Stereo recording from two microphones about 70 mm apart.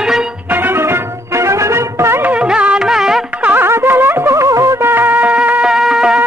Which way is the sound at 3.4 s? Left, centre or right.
Right.